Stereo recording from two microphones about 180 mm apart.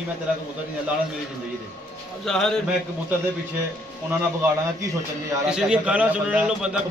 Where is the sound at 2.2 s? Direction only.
5° left (ahead or behind).